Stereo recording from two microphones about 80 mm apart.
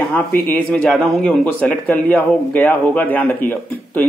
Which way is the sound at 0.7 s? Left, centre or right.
Centre.